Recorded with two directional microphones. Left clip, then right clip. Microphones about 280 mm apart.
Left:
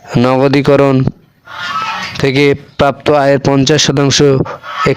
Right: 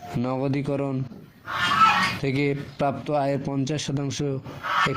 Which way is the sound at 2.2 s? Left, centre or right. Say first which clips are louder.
Left 15 dB; left.